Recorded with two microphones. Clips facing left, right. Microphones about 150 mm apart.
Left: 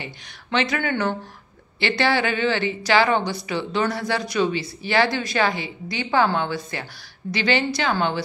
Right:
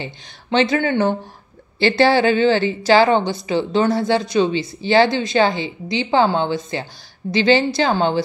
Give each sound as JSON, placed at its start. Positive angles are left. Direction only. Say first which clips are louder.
{"t": 0.0, "sound": "speech", "louder": "right 5 dB", "side_deg": -30}